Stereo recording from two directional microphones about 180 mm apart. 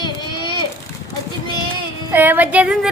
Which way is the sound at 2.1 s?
10° right (ahead or behind).